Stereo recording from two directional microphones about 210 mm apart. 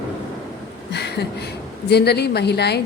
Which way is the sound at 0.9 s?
55° left (ahead or behind).